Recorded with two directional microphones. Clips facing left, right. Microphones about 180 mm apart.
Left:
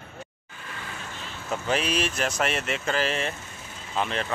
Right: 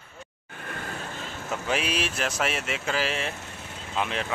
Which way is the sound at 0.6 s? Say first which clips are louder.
Right 4 dB; 55° right (ahead or behind).